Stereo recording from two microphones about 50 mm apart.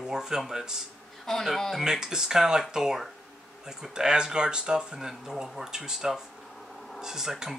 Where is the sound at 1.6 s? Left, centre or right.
Centre.